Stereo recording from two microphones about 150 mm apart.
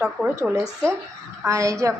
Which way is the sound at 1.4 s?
20° right (ahead or behind).